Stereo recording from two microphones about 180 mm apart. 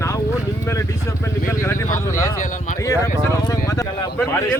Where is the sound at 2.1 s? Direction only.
15° left (ahead or behind).